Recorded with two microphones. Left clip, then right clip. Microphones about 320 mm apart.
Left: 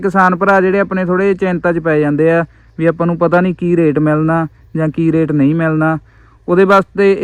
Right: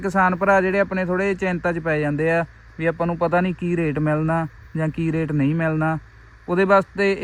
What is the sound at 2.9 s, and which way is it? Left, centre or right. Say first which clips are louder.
A man's voice: left 7 dB; left.